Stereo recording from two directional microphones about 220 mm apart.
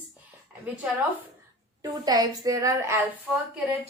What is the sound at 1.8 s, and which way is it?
A woman's voice, 15° right (ahead or behind).